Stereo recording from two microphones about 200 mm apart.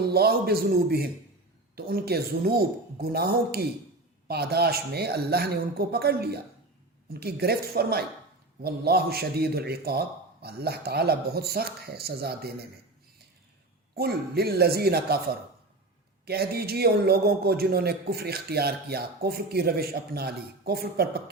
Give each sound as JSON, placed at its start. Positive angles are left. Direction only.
{"t": 0.0, "sound": "a man's voice", "side_deg": -50}
{"t": 13.9, "sound": "a man's voice", "side_deg": -50}